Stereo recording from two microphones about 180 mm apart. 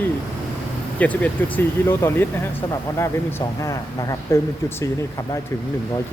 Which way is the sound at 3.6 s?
15° left (ahead or behind).